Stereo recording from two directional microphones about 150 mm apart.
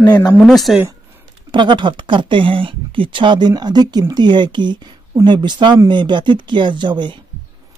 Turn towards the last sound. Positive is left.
turn(degrees=-30)  # may be behind; listen again after turning